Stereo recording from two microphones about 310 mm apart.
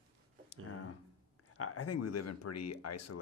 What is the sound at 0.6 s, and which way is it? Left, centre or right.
Speech, left.